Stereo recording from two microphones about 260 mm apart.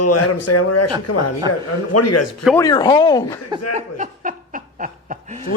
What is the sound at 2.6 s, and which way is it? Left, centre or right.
Speech, centre.